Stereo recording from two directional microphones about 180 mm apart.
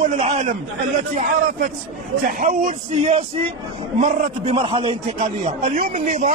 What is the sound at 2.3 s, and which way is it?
Speech, 45° right (ahead or behind).